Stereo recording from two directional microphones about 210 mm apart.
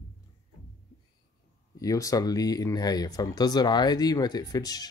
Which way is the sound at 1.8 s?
15° left (ahead or behind).